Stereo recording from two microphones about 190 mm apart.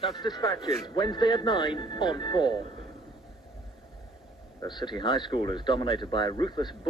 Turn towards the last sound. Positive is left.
turn(degrees=25)  # may be behind; listen again after turning